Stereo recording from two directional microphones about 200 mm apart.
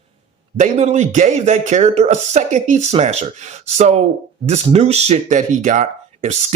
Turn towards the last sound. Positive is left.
turn(degrees=-35)  # may be behind; listen again after turning